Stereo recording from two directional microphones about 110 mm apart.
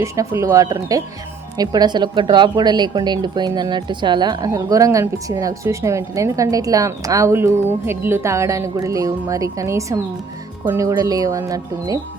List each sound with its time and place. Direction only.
0.0 s speech: 25° right (ahead or behind)